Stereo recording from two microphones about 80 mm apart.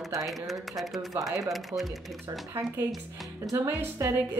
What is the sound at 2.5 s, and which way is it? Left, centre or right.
Speech, right.